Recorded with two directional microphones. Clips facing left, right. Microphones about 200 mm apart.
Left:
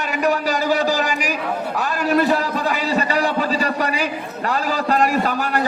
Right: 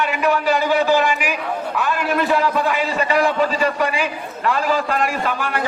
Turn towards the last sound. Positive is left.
turn(degrees=40)  # may be behind; listen again after turning